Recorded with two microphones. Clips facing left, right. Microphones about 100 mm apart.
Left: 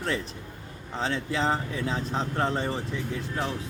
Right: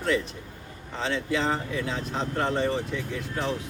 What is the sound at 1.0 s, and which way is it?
Speech, 35° left (ahead or behind).